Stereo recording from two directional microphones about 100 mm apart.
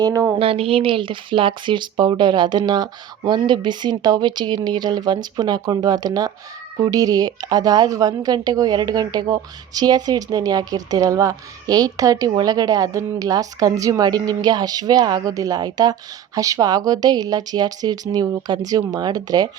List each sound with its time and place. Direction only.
0.0 s a woman's voice: 35° right (ahead or behind)
0.3 s a woman's voice: 70° right (ahead or behind); by 19.5 s 40° right (ahead or behind)